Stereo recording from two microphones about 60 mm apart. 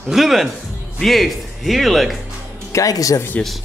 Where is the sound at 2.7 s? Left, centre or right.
Left.